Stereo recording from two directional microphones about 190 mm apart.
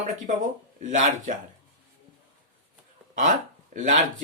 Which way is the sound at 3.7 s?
40° right (ahead or behind).